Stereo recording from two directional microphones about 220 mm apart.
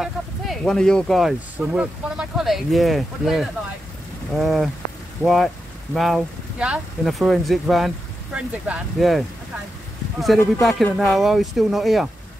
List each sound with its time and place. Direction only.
0.0 s speech: centre (ahead or behind)
10.2 s speech: centre (ahead or behind)